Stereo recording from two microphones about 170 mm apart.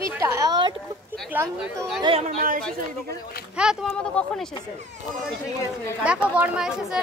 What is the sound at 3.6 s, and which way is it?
Speech, 5° right (ahead or behind).